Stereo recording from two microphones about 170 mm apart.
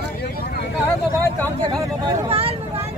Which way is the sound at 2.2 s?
35° right (ahead or behind).